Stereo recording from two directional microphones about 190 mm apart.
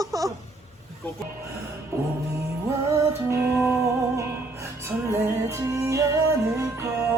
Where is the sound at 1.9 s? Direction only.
15° right (ahead or behind).